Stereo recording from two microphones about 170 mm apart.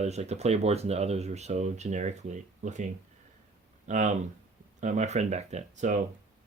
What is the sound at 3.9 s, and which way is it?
Speech, 45° right (ahead or behind).